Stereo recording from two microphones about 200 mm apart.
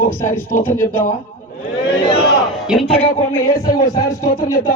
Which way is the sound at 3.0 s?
25° left (ahead or behind).